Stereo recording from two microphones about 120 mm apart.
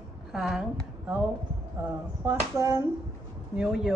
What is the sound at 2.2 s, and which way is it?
Speech, 25° right (ahead or behind).